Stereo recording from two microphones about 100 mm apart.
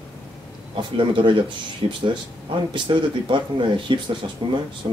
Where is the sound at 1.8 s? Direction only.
70° right (ahead or behind).